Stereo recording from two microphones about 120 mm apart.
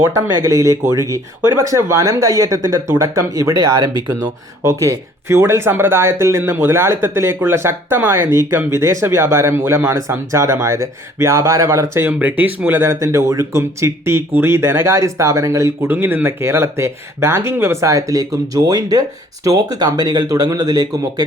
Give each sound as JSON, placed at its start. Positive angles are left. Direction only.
{"t": 0.3, "sound": "speech", "side_deg": -25}
{"t": 15.9, "sound": "speech", "side_deg": -15}